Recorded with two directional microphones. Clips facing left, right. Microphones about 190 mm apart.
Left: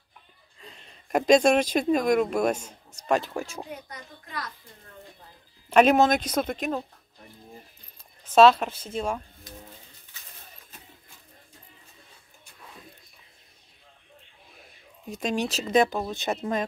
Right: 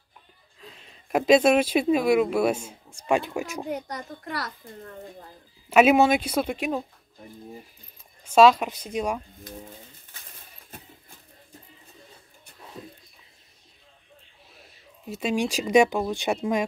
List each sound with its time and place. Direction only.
0.6 s speech: centre (ahead or behind)
3.8 s a child's voice: 80° right
5.7 s speech: 5° right (ahead or behind)
8.3 s speech: 10° right (ahead or behind)
15.0 s speech: 5° right (ahead or behind)